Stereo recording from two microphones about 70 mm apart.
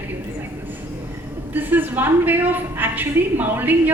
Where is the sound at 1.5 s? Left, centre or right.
Right.